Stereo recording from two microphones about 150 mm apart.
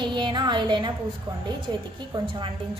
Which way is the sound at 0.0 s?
30° right (ahead or behind).